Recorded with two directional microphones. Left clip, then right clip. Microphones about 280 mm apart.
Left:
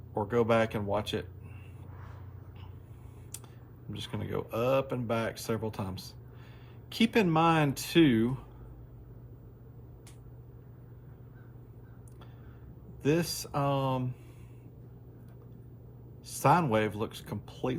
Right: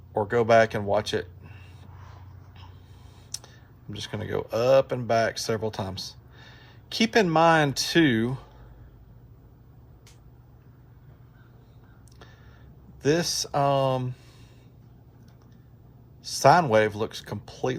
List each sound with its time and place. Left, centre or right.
0.1 s speech: right
3.9 s speech: right
13.1 s speech: right
16.4 s speech: right